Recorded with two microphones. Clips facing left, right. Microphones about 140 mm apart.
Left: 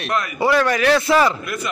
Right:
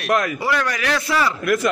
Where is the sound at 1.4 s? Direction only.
90° right.